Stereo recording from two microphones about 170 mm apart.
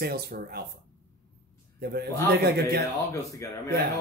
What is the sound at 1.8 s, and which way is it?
A man's voice, 70° right (ahead or behind).